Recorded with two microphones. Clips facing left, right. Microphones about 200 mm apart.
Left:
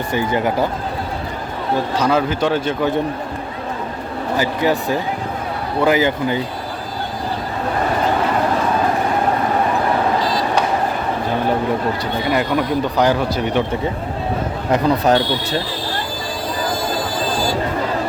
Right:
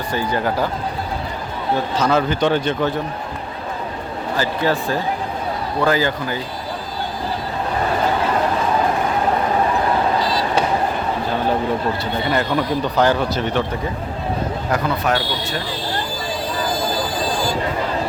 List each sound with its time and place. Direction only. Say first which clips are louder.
0.1 s speech: left 2 dB; 20° left (ahead or behind)
2.0 s speech: even; 10° left (ahead or behind)
4.4 s speech: left 2 dB; 15° left (ahead or behind)
12.3 s speech: left 2 dB; 10° left (ahead or behind)
14.8 s speech: left 8 dB; 35° left (ahead or behind)